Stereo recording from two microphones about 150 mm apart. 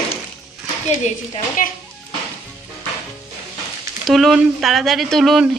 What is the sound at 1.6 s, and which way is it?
Speech, 65° left (ahead or behind).